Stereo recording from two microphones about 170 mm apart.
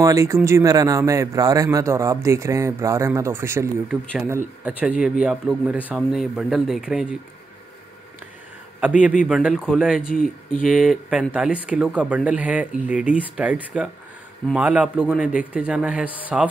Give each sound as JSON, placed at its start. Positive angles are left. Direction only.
{"t": 0.0, "sound": "a man's voice", "side_deg": -20}
{"t": 5.8, "sound": "speech", "side_deg": 10}
{"t": 6.1, "sound": "a man's voice", "side_deg": 0}
{"t": 8.8, "sound": "a man's voice", "side_deg": -5}